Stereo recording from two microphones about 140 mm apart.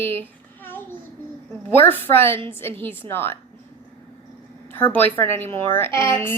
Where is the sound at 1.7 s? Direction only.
15° left (ahead or behind).